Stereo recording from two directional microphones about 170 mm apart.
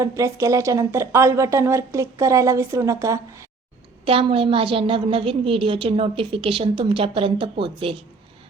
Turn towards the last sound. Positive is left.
turn(degrees=-30)  # may be behind; listen again after turning